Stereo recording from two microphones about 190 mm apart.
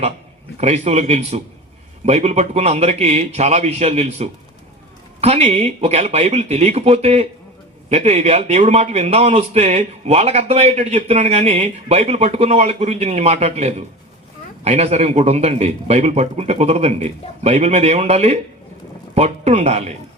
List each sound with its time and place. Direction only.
0.6 s a man's voice: 35° right (ahead or behind)